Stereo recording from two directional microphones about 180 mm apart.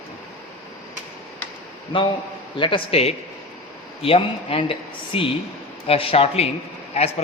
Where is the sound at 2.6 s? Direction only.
30° left (ahead or behind).